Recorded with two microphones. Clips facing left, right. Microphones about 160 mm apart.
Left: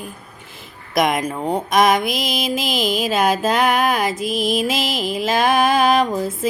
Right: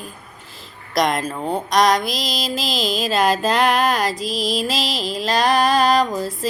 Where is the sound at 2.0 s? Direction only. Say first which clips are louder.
Left 3 dB; 55° left (ahead or behind).